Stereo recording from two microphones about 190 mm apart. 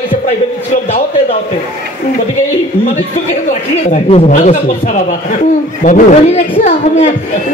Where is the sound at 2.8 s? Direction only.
40° left (ahead or behind).